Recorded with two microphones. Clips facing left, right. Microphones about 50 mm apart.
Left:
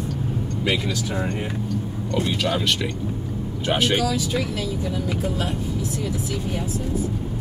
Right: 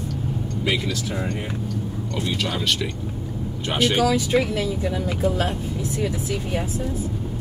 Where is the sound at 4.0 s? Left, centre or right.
Right.